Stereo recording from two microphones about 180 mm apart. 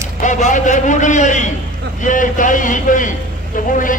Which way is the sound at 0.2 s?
45° left (ahead or behind).